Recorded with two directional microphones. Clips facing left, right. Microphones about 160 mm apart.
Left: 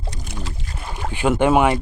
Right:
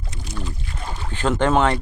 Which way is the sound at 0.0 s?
35° left (ahead or behind).